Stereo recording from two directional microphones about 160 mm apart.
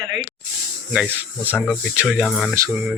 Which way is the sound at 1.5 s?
10° left (ahead or behind).